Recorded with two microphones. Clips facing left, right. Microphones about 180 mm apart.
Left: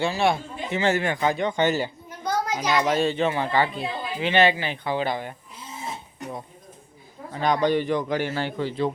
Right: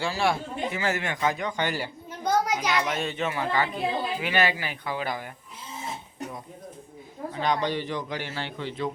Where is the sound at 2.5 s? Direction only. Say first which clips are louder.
Left 4 dB; 35° left (ahead or behind).